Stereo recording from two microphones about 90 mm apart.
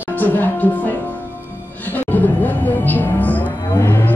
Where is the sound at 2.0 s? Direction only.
20° left (ahead or behind).